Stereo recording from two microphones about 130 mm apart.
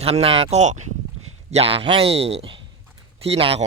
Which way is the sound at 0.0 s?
50° right (ahead or behind).